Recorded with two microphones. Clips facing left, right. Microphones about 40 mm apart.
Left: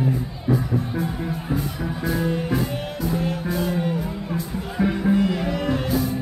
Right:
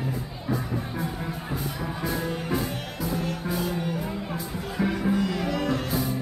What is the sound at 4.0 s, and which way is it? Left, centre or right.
Music, centre.